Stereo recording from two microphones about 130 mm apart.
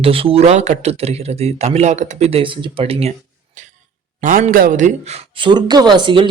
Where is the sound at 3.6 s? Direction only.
70° right (ahead or behind).